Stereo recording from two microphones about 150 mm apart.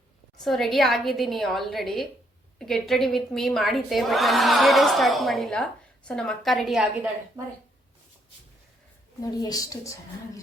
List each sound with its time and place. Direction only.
0.3 s a woman's voice: centre (ahead or behind)
9.2 s speech: 25° left (ahead or behind)